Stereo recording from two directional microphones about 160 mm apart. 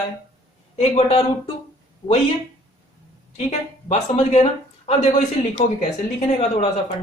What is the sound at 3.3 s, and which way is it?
Speech, 45° left (ahead or behind).